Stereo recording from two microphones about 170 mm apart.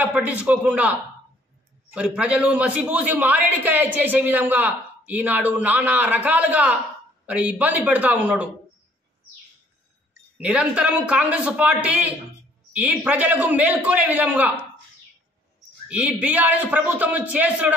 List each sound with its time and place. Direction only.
0.0 s a man's voice: 10° right (ahead or behind)
2.0 s a man's voice: 5° right (ahead or behind)
10.3 s a man's voice: 5° right (ahead or behind)
15.9 s a man's voice: 5° right (ahead or behind)